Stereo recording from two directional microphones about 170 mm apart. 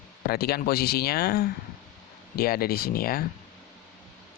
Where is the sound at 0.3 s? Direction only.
65° left (ahead or behind).